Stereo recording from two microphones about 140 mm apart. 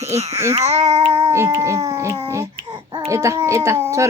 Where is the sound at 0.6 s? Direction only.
50° right (ahead or behind).